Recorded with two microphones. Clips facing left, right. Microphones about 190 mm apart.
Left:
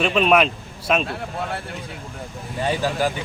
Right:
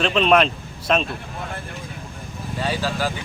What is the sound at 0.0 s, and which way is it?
Speech, 5° left (ahead or behind).